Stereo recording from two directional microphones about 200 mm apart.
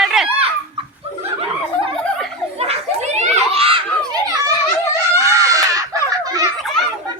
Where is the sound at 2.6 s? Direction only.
30° right (ahead or behind).